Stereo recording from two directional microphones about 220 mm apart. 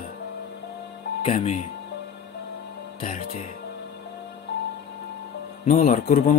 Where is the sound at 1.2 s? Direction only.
25° left (ahead or behind).